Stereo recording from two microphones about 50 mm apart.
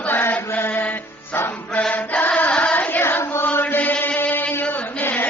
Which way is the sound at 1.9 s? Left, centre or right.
Left.